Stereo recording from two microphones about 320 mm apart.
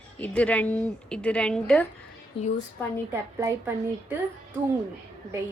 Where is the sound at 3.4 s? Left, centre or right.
Centre.